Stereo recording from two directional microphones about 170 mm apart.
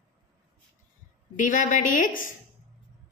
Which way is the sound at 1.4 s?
50° left (ahead or behind).